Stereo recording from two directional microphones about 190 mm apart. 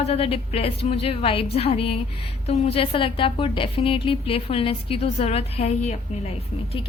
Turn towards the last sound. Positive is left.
turn(degrees=35)  # may be behind; listen again after turning